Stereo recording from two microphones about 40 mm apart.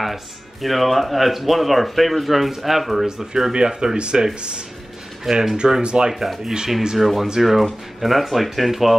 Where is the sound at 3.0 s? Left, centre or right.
Centre.